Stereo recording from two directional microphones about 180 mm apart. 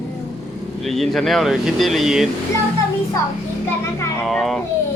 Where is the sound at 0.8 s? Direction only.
Centre (ahead or behind).